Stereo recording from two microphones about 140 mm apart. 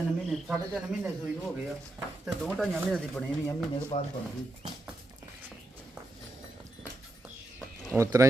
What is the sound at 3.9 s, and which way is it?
Speech, 50° left (ahead or behind).